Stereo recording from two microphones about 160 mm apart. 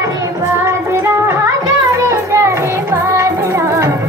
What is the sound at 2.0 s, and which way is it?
Music, 15° right (ahead or behind).